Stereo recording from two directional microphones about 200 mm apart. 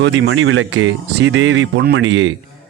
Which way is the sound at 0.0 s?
65° right (ahead or behind).